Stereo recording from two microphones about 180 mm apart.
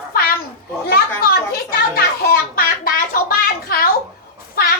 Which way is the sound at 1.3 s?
55° left (ahead or behind).